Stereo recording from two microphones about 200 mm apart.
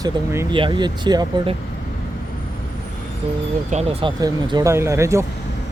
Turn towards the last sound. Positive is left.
turn(degrees=-15)  # may be behind; listen again after turning